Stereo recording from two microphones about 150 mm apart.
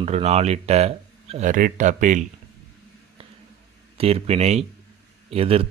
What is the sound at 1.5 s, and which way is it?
Speech, 60° right (ahead or behind).